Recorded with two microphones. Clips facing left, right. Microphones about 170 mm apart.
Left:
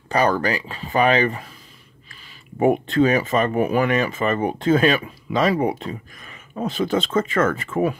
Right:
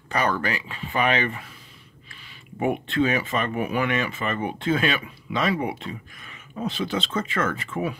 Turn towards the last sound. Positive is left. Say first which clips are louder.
# left 6 dB
turn(degrees=45)  # may be behind; listen again after turning